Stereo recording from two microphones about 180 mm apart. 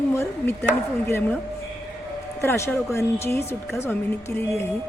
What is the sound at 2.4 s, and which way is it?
Speech, 15° left (ahead or behind).